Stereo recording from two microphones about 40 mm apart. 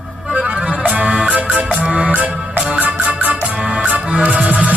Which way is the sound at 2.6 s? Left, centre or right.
Right.